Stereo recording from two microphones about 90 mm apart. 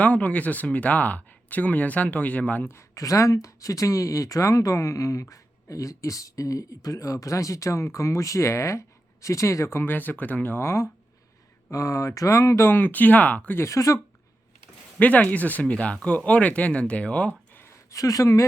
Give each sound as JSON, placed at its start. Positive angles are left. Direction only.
{"t": 0.0, "sound": "speech", "side_deg": 15}
{"t": 13.6, "sound": "speech", "side_deg": 35}
{"t": 14.9, "sound": "speech", "side_deg": 15}
{"t": 17.9, "sound": "speech", "side_deg": 40}